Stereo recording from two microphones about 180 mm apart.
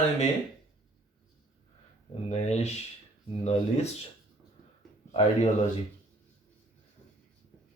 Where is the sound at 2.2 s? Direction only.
35° left (ahead or behind).